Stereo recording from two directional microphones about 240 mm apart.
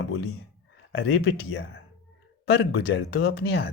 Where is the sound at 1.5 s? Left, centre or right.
Left.